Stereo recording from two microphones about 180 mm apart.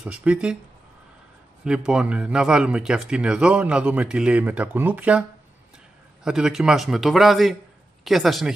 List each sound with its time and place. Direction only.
0.0 s speech: 5° right (ahead or behind)
1.6 s speech: 5° right (ahead or behind)
6.2 s speech: 5° right (ahead or behind)